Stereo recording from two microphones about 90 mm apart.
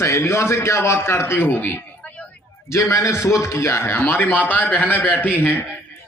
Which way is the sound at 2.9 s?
30° left (ahead or behind).